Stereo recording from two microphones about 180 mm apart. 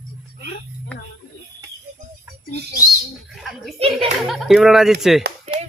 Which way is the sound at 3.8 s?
35° right (ahead or behind).